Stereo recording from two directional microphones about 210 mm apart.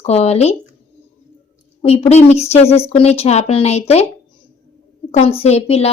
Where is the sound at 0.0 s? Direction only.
30° left (ahead or behind).